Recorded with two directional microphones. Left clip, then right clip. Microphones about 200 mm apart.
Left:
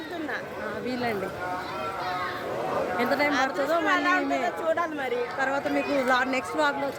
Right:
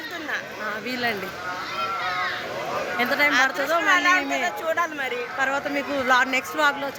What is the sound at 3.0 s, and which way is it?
A woman's voice, 15° right (ahead or behind).